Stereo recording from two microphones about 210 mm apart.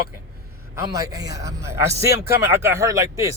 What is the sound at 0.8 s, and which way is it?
A man's voice, 15° right (ahead or behind).